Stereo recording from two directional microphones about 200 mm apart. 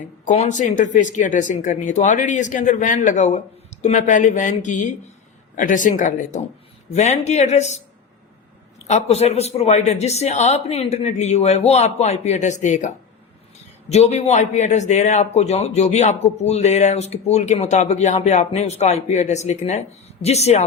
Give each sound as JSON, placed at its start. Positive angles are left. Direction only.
{"t": 0.3, "sound": "a man's voice", "side_deg": 35}
{"t": 8.8, "sound": "a man's voice", "side_deg": 30}
{"t": 13.9, "sound": "a man's voice", "side_deg": 35}